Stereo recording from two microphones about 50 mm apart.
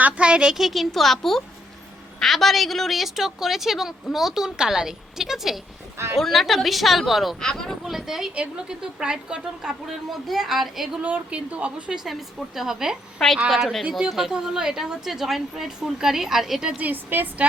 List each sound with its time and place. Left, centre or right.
0.0 s a sound: right
0.5 s a woman's voice: centre
6.1 s a woman's voice: centre
10.1 s speech: centre
11.0 s a woman's voice: right
12.5 s a woman's voice: centre
13.1 s a woman's voice: centre
16.8 s a woman's voice: right